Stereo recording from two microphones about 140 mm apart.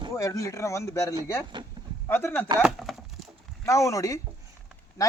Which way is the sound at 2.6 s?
Centre (ahead or behind).